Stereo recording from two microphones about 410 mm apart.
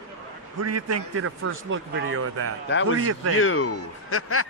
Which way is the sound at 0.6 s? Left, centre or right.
Right.